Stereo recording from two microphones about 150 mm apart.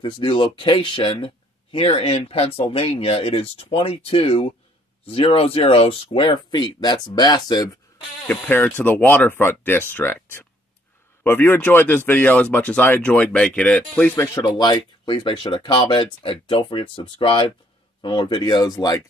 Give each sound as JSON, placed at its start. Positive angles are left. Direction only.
{"t": 0.0, "sound": "speech", "side_deg": 35}
{"t": 8.3, "sound": "speech", "side_deg": 10}
{"t": 14.1, "sound": "speech", "side_deg": 20}